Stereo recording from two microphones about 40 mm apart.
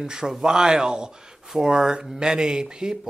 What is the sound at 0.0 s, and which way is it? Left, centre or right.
Speech, centre.